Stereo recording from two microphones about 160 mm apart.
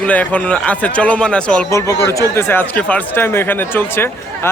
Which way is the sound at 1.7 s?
20° left (ahead or behind).